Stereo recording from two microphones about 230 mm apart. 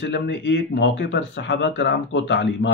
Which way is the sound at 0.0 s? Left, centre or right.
Left.